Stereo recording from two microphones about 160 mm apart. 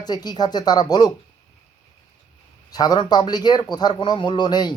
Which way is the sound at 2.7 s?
25° left (ahead or behind).